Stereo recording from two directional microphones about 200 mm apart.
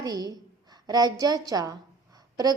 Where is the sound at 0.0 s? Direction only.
20° right (ahead or behind).